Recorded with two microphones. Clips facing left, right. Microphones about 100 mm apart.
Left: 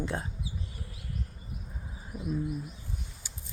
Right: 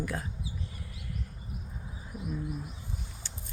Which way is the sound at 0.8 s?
35° left (ahead or behind).